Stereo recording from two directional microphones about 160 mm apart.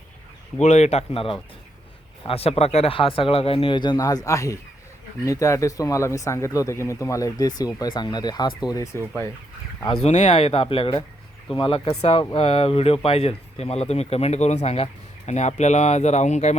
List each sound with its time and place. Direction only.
0.6 s speech: 45° left (ahead or behind); by 9.0 s 20° left (ahead or behind)
10.0 s speech: 45° left (ahead or behind)